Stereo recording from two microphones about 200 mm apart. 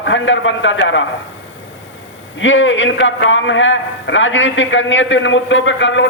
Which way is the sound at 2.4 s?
70° left (ahead or behind).